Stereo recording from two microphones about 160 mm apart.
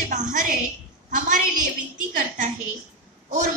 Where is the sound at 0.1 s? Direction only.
55° right (ahead or behind).